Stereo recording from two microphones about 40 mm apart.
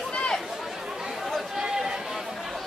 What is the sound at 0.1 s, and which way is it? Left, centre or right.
Chatter, left.